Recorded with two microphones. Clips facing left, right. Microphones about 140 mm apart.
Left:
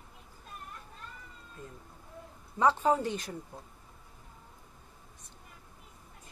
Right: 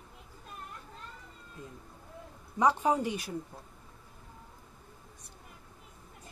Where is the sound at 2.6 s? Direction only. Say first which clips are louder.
Even; 15° right (ahead or behind).